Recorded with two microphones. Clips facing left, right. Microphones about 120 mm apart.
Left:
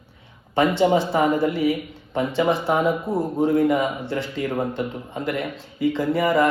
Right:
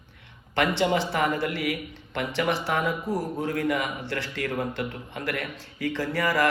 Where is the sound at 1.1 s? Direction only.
20° left (ahead or behind).